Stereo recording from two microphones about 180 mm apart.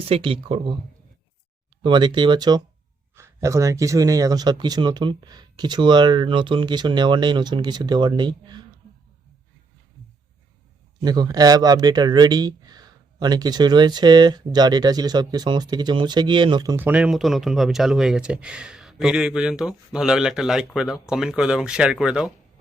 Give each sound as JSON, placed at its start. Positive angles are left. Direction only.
{"t": 0.1, "sound": "speech", "side_deg": -30}
{"t": 1.8, "sound": "speech", "side_deg": -25}
{"t": 11.0, "sound": "speech", "side_deg": -20}
{"t": 16.7, "sound": "speech", "side_deg": -10}